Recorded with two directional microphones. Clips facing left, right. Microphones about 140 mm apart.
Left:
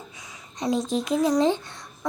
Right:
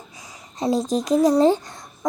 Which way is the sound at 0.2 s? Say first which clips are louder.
Right 5 dB; 35° right (ahead or behind).